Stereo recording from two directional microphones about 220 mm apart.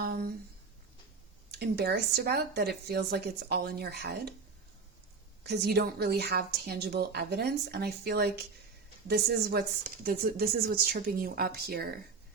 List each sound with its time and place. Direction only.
0.0 s a sound: 45° right (ahead or behind)
1.5 s speech: 50° right (ahead or behind)
5.4 s speech: 50° right (ahead or behind)